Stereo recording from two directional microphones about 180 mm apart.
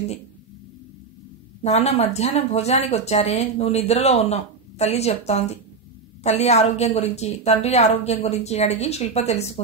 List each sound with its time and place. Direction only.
1.6 s a woman's voice: 35° left (ahead or behind)